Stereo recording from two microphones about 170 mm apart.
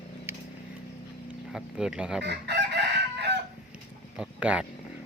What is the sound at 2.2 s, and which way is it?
Chicken, 85° right.